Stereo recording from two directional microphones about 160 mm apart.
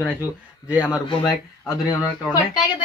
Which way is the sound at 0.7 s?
5° right (ahead or behind).